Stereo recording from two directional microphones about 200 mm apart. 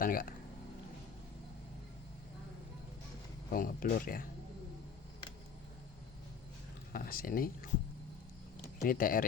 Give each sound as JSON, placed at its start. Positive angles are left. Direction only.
{"t": 0.0, "sound": "speech", "side_deg": 45}
{"t": 3.5, "sound": "speech", "side_deg": 45}
{"t": 6.9, "sound": "speech", "side_deg": 45}
{"t": 8.6, "sound": "speech", "side_deg": 45}